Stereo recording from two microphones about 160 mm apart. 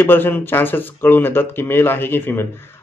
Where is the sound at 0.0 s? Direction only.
15° left (ahead or behind).